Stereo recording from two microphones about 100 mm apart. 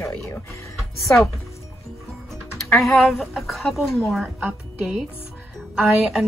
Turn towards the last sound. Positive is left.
turn(degrees=-10)  # may be behind; listen again after turning